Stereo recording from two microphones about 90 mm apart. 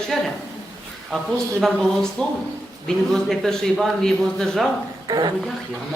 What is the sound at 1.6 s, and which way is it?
A man's voice, 5° left (ahead or behind).